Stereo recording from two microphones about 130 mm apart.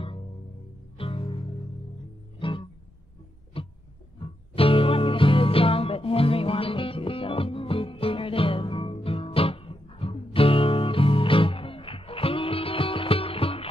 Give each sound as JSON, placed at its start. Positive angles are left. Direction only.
{"t": 0.9, "sound": "music", "side_deg": 45}
{"t": 2.3, "sound": "music", "side_deg": 40}
{"t": 3.6, "sound": "a sound", "side_deg": 45}
{"t": 4.6, "sound": "music", "side_deg": 45}